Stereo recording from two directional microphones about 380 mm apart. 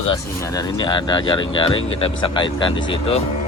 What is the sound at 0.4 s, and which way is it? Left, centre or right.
Speech, centre.